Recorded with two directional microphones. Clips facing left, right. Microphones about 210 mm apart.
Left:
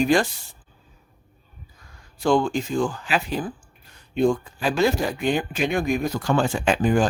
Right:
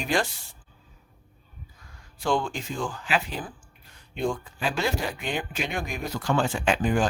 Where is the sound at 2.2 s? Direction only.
45° left (ahead or behind).